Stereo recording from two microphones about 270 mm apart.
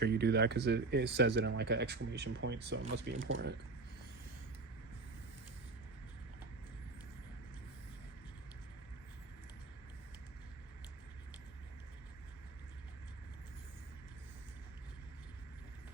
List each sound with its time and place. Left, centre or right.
0.0 s speech: right